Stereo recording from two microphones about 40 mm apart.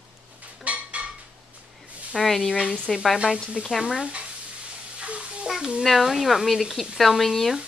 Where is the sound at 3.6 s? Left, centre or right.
Right.